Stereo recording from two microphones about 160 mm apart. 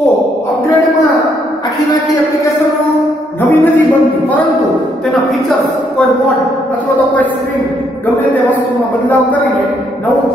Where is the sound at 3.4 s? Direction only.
10° left (ahead or behind).